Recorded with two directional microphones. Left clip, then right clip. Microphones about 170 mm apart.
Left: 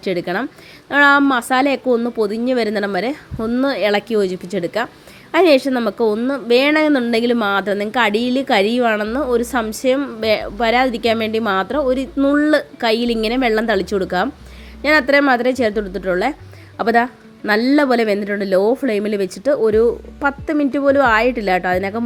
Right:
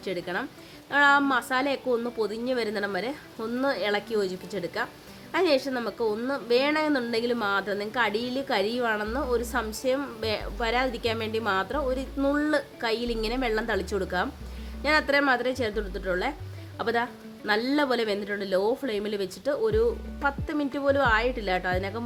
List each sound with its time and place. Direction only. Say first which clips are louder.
0.0 s a woman's voice: left 10 dB; 20° left (ahead or behind)